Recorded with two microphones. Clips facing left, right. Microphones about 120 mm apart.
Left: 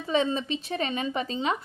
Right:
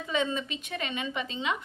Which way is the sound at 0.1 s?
35° left (ahead or behind).